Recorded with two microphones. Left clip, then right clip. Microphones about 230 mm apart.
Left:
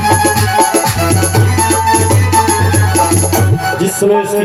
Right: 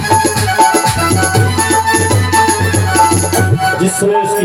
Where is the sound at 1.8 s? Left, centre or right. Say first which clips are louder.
Left 1 dB; left.